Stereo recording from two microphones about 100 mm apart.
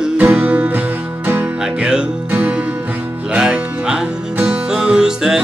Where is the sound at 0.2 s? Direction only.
15° right (ahead or behind).